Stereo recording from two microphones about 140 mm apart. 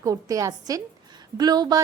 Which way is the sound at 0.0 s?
25° right (ahead or behind).